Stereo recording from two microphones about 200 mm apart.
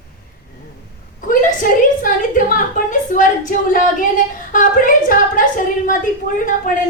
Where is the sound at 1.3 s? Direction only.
45° left (ahead or behind).